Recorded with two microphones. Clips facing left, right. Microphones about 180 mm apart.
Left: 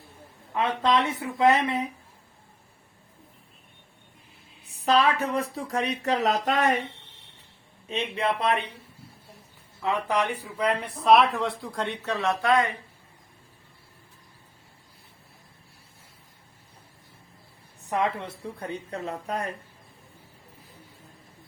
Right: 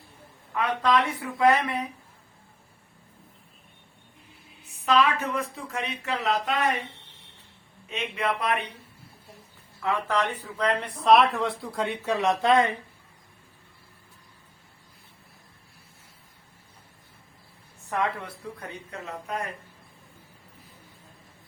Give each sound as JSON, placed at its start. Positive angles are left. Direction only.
{"t": 0.5, "sound": "speech", "side_deg": 25}
{"t": 4.6, "sound": "speech", "side_deg": 35}
{"t": 7.9, "sound": "speech", "side_deg": 30}
{"t": 9.8, "sound": "speech", "side_deg": 15}
{"t": 17.8, "sound": "speech", "side_deg": 20}